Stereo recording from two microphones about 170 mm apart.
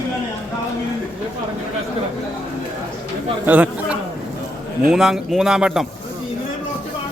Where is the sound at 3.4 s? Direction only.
10° right (ahead or behind).